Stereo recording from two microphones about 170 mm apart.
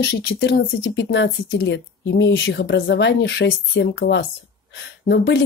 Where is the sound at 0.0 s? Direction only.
70° left (ahead or behind).